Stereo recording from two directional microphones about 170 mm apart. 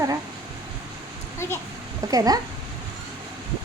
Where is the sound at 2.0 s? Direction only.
20° right (ahead or behind).